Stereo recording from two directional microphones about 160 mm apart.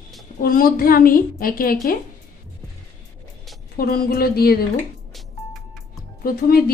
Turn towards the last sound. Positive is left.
turn(degrees=70)  # may be behind; listen again after turning